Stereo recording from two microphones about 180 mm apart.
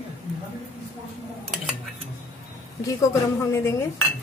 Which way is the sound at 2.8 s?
15° left (ahead or behind).